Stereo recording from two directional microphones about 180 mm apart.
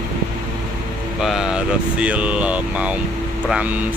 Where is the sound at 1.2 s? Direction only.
Centre (ahead or behind).